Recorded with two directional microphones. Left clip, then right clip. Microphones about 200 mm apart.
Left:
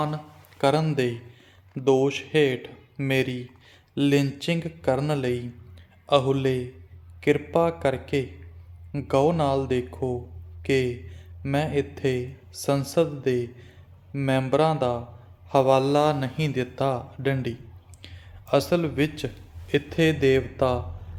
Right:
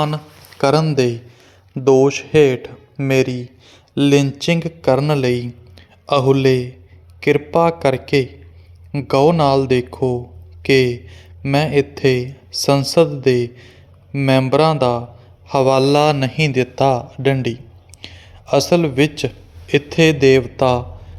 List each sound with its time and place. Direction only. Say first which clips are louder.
0.6 s a man's voice: right 8 dB; 35° right (ahead or behind)